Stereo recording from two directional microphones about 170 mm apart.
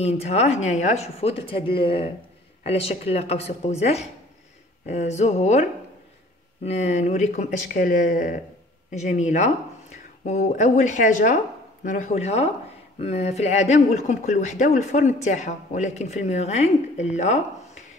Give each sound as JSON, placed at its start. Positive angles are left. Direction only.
{"t": 0.0, "sound": "speech", "side_deg": 40}